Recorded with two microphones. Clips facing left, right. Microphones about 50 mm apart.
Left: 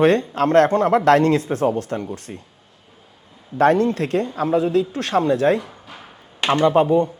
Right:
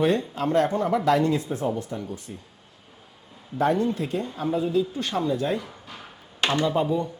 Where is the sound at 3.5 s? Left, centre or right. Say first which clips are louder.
Left 7 dB; left.